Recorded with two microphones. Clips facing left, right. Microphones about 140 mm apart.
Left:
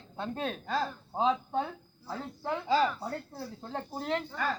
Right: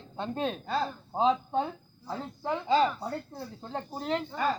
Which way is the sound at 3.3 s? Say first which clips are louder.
Right 1 dB; centre (ahead or behind).